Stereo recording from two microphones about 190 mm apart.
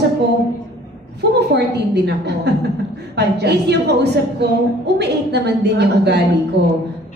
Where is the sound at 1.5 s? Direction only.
60° right (ahead or behind).